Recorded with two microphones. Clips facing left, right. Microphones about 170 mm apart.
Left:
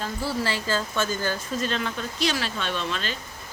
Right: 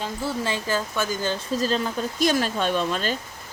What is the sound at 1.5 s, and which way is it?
Speech, 35° right (ahead or behind).